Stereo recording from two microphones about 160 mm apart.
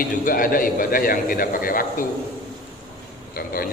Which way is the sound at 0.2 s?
60° left (ahead or behind).